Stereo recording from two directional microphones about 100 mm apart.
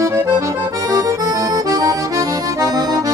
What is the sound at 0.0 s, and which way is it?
Accordion, 30° right (ahead or behind).